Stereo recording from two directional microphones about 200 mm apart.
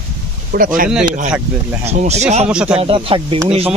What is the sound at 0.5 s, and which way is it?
Speech, 45° right (ahead or behind).